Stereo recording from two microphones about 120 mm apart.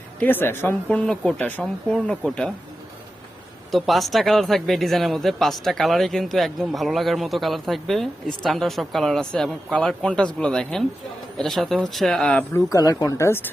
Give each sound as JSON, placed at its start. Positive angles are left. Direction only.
{"t": 0.2, "sound": "speech", "side_deg": 15}
{"t": 0.9, "sound": "speech", "side_deg": 5}
{"t": 3.7, "sound": "speech", "side_deg": 0}
{"t": 12.5, "sound": "speech", "side_deg": 30}